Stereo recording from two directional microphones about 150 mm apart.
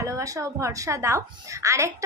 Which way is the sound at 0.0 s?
20° right (ahead or behind).